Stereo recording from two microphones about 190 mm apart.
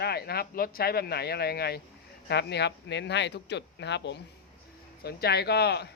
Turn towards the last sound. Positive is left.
turn(degrees=60)  # may be behind; listen again after turning